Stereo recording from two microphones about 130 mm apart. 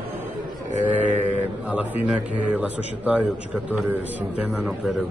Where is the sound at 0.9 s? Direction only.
15° right (ahead or behind).